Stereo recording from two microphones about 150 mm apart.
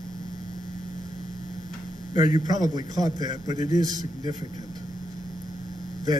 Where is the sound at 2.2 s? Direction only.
25° right (ahead or behind).